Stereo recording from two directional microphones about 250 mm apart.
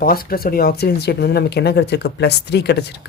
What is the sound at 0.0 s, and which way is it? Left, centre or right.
Speech, left.